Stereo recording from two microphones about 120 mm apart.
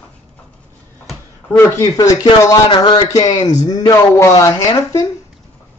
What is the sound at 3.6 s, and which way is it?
Speech, 30° left (ahead or behind).